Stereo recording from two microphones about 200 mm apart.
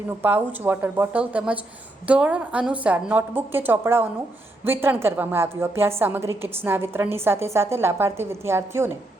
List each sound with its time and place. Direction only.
0.2 s a woman's voice: 10° right (ahead or behind)